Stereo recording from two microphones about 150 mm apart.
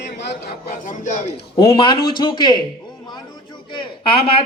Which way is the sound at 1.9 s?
90° left.